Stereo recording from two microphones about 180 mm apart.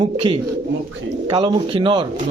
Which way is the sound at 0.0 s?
30° right (ahead or behind).